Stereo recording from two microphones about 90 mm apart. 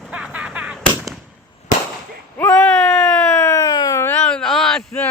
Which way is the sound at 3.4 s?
30° left (ahead or behind).